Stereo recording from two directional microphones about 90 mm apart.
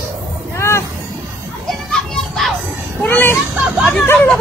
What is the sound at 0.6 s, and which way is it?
Music, 30° left (ahead or behind).